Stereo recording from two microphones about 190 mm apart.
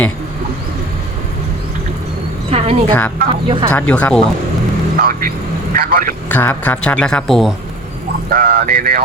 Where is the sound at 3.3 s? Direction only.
25° right (ahead or behind).